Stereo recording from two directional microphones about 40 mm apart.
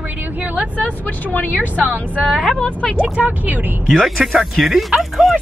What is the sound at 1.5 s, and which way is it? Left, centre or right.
Speech, right.